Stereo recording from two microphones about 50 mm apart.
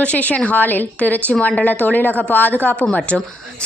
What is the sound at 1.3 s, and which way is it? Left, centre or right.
A woman's voice, left.